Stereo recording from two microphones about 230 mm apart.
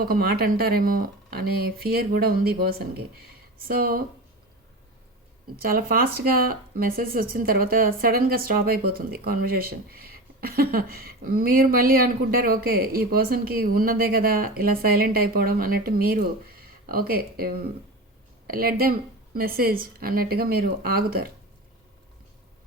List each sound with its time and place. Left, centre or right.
0.0 s speech: right
5.6 s speech: right